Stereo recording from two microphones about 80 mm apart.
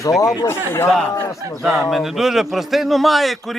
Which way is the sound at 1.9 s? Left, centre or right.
Centre.